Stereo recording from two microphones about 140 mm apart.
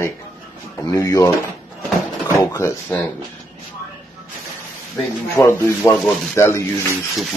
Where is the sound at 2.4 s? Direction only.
20° left (ahead or behind).